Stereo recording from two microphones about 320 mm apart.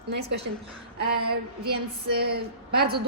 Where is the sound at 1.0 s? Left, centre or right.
Right.